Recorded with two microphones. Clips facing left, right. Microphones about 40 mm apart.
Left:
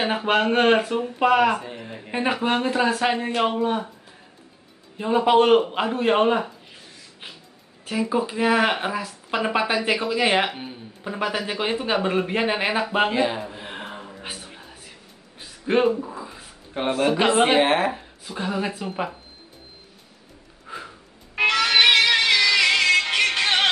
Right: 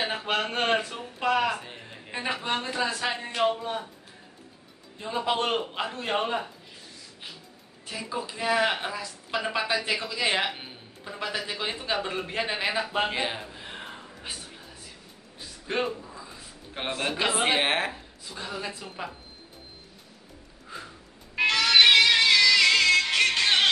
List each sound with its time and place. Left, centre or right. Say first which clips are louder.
0.0 s speech: left 7 dB; left
4.9 s speech: left 10 dB; left
8.1 s speech: left 6 dB; left
10.5 s speech: left 5 dB; centre
11.1 s speech: left 6 dB; left
13.1 s speech: left 7 dB; centre
13.5 s a sound: left 5 dB; left
16.8 s speech: left 8 dB; centre
17.9 s speech: left 7 dB; left
20.6 s music: left 5 dB; left